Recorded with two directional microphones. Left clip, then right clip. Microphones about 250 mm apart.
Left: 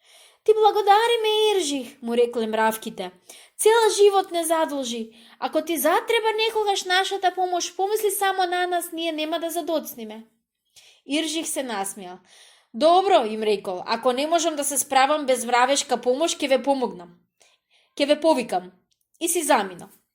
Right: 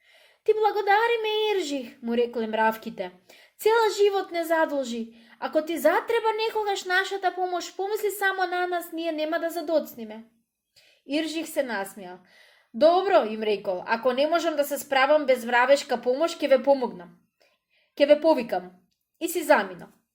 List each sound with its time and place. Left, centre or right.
0.4 s a woman's voice: centre